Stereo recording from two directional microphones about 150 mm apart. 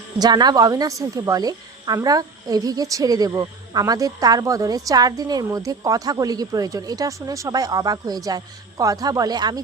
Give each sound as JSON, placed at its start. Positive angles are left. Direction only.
{"t": 0.2, "sound": "speech", "side_deg": -30}